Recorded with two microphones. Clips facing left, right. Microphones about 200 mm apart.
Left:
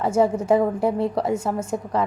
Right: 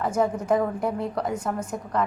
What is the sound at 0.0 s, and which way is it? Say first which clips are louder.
A woman's voice: left 4 dB; 30° left (ahead or behind).